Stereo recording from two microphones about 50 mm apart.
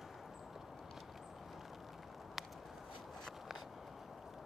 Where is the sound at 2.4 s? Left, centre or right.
Centre.